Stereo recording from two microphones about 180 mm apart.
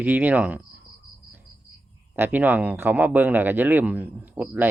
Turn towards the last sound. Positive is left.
turn(degrees=-10)  # may be behind; listen again after turning